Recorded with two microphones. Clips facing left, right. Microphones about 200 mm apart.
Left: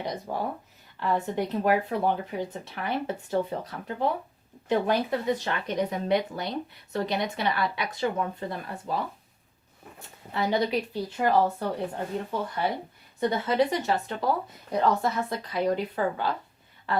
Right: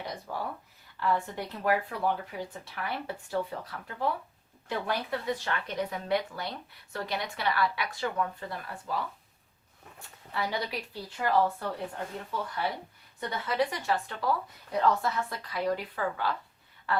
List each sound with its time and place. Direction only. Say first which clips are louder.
0.0 s speech: left 5 dB; 20° left (ahead or behind)
10.3 s speech: left 7 dB; 20° left (ahead or behind)